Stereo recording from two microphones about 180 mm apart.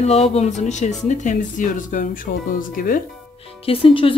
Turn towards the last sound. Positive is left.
turn(degrees=30)  # may be behind; listen again after turning